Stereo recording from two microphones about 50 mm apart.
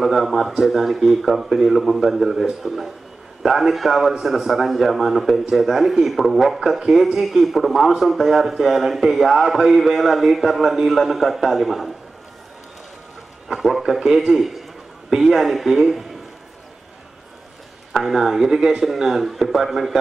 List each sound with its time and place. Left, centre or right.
0.0 s speech: centre
13.5 s speech: centre
17.9 s speech: centre